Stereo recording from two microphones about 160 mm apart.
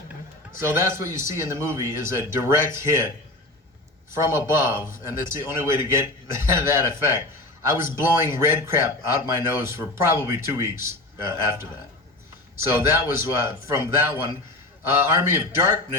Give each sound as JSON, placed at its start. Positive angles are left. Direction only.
{"t": 0.6, "sound": "a man's voice", "side_deg": -15}
{"t": 4.1, "sound": "a man's voice", "side_deg": -15}